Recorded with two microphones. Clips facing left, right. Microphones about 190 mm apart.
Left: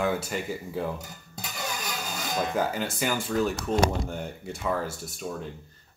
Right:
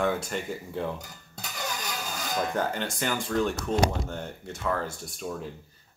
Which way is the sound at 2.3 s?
5° left (ahead or behind).